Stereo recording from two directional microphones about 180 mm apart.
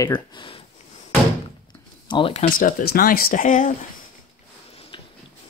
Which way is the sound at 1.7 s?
25° left (ahead or behind).